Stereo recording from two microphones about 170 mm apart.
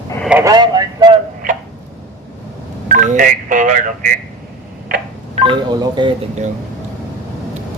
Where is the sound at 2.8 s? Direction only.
50° right (ahead or behind).